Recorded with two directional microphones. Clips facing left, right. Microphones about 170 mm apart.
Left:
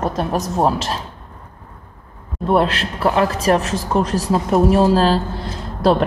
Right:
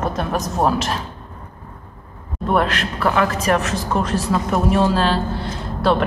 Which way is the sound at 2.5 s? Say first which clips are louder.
Left 2 dB; 30° left (ahead or behind).